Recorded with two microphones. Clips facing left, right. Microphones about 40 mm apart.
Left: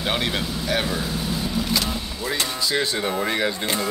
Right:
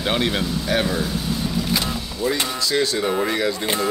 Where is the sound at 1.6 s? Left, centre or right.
Left.